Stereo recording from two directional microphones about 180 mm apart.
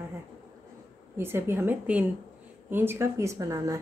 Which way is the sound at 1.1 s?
15° right (ahead or behind).